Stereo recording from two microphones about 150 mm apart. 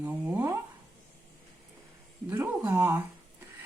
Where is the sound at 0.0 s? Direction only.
15° right (ahead or behind).